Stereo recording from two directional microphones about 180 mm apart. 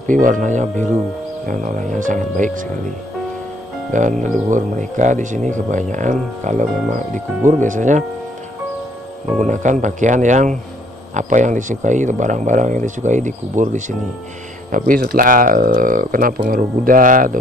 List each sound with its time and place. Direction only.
0.1 s speech: 45° right (ahead or behind)
3.9 s speech: 45° right (ahead or behind)
9.4 s speech: 45° right (ahead or behind)